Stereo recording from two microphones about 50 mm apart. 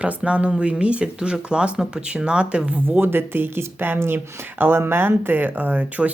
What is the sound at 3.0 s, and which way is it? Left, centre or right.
Speech, right.